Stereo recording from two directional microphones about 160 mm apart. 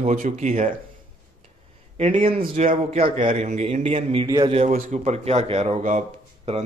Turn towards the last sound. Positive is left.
turn(degrees=-45)  # may be behind; listen again after turning